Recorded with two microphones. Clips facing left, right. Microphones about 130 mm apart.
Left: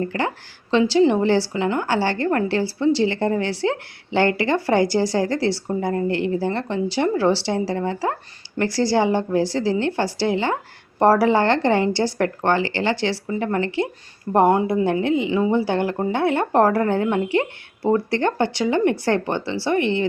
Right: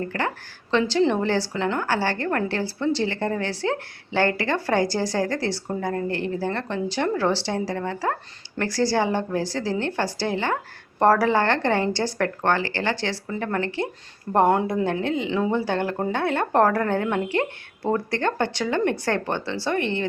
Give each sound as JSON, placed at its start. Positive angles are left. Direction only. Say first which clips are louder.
{"t": 0.2, "sound": "a woman's voice", "louder": "left 3 dB", "side_deg": 15}
{"t": 14.8, "sound": "a woman's voice", "louder": "left 4 dB", "side_deg": 15}